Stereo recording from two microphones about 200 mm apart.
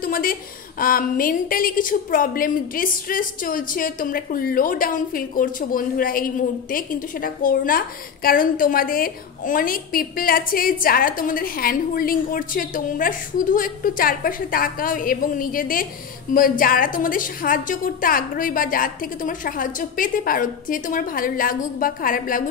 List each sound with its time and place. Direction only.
0.0 s a woman's voice: 45° left (ahead or behind)